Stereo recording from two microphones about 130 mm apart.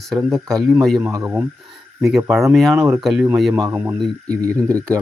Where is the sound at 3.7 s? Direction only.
15° right (ahead or behind).